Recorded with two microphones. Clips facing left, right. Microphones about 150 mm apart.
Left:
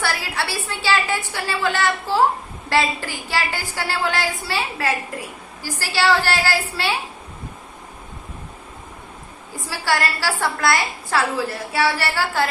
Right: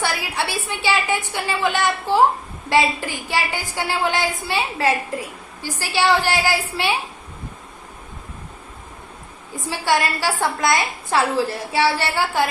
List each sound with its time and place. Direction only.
0.0 s a woman's voice: 15° right (ahead or behind)
9.6 s a woman's voice: 20° right (ahead or behind)